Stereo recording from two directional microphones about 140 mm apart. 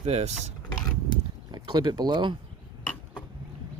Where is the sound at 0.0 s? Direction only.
50° right (ahead or behind).